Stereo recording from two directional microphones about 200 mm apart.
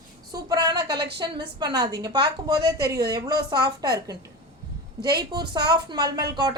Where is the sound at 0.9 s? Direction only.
55° right (ahead or behind).